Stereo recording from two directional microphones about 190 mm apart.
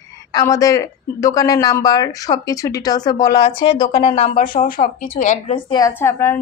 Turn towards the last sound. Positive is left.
turn(degrees=15)  # may be behind; listen again after turning